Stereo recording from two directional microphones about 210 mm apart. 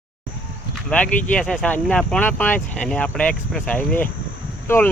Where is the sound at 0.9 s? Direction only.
5° left (ahead or behind).